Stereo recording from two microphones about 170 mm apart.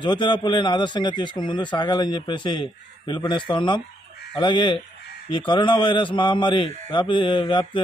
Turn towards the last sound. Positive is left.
turn(degrees=30)  # may be behind; listen again after turning